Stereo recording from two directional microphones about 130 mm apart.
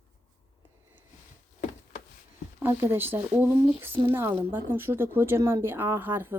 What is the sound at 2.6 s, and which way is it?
Speech, 15° right (ahead or behind).